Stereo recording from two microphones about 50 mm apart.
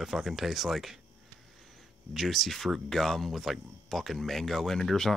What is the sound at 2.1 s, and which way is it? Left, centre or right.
Speech, centre.